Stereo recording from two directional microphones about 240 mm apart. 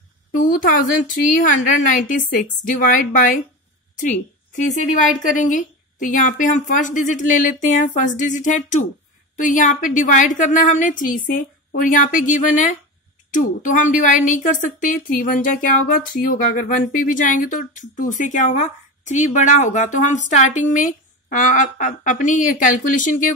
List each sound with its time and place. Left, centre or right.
0.4 s a woman's voice: left
5.2 s a woman's voice: left